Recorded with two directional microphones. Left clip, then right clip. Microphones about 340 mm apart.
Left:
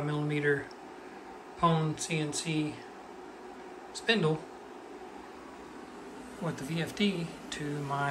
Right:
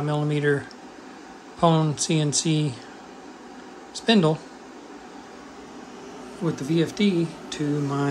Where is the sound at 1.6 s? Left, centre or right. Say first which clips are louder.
Right 8 dB; centre.